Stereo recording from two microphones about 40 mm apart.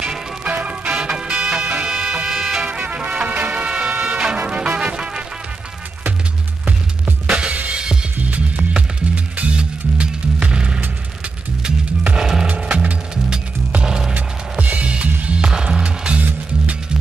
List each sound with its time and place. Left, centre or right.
0.0 s music: right
1.6 s music: right
1.9 s music: right
3.0 s music: right
3.6 s music: right
7.2 s music: right
8.2 s music: right
12.2 s music: centre
12.5 s music: right
13.8 s music: centre
14.1 s music: right
15.5 s music: centre
15.8 s music: right